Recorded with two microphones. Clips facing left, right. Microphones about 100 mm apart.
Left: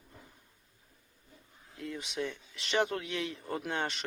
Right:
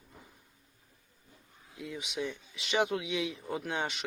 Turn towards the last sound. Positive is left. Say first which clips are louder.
# even
turn(degrees=-5)  # may be behind; listen again after turning